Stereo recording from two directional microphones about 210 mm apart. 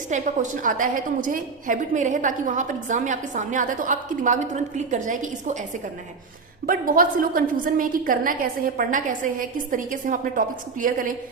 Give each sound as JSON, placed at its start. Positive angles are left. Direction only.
{"t": 0.1, "sound": "a woman's voice", "side_deg": -40}
{"t": 6.7, "sound": "a woman's voice", "side_deg": -40}